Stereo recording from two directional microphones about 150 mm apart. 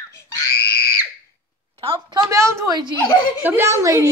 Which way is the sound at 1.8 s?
30° right (ahead or behind).